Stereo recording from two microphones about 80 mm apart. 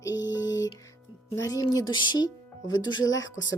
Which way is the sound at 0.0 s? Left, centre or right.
Left.